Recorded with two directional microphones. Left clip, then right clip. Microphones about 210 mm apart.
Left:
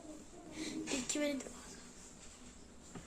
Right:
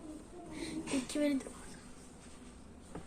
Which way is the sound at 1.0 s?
30° left (ahead or behind).